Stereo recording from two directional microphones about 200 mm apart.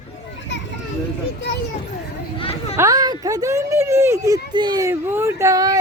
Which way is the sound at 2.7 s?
15° right (ahead or behind).